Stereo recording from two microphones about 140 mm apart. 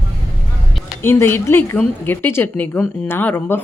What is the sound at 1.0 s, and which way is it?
Speech, 15° left (ahead or behind).